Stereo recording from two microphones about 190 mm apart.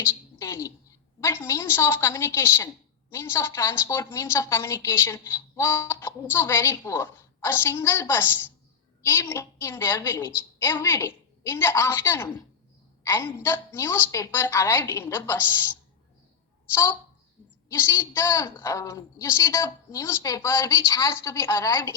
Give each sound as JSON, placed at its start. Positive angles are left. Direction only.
{"t": 0.0, "sound": "a woman's voice", "side_deg": 15}
{"t": 16.7, "sound": "a woman's voice", "side_deg": 15}